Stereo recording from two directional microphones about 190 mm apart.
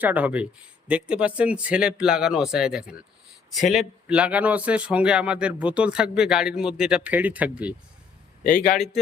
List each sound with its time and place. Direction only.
0.0 s a man's voice: 10° right (ahead or behind)
4.1 s speech: 5° right (ahead or behind)
8.4 s speech: 45° left (ahead or behind)